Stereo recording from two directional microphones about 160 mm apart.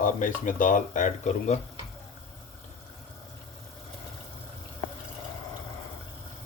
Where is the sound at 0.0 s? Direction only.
55° left (ahead or behind).